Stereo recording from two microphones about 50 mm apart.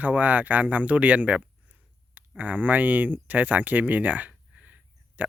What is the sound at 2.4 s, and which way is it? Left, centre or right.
Speech, right.